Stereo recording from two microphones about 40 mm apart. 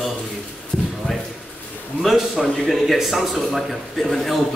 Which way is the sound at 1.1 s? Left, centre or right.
Left.